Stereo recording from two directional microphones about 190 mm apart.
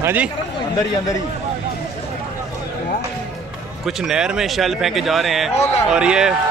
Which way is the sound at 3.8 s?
5° right (ahead or behind).